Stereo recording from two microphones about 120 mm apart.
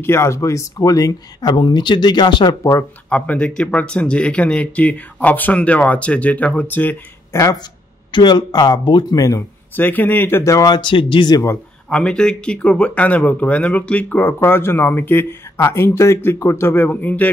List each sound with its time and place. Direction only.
0.0 s speech: 20° left (ahead or behind); by 2.5 s 40° left (ahead or behind)
3.1 s speech: 10° left (ahead or behind)
8.1 s speech: 35° left (ahead or behind)
9.8 s speech: 15° left (ahead or behind); by 11.4 s 40° left (ahead or behind)
11.9 s speech: 10° left (ahead or behind)